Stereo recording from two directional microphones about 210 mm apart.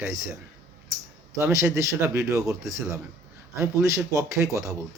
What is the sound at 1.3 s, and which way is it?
Speech, 15° right (ahead or behind).